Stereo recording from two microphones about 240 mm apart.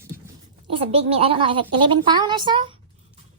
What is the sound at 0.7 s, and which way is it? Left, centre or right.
A woman's voice, right.